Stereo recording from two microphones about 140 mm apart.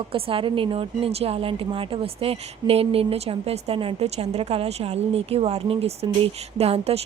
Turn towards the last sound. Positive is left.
turn(degrees=-45)  # may be behind; listen again after turning